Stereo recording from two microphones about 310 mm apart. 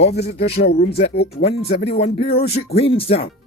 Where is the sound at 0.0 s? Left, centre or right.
Left.